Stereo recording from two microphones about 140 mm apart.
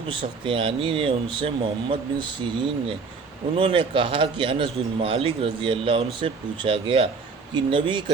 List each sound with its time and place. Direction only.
0.1 s speech: 35° right (ahead or behind)